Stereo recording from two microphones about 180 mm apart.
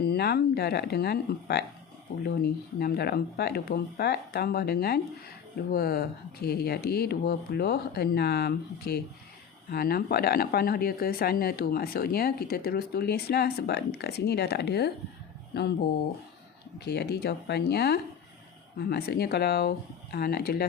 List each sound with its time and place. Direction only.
0.0 s speech: 60° left (ahead or behind)